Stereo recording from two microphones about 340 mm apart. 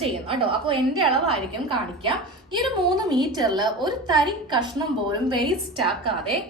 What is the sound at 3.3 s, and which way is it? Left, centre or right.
A woman's voice, centre.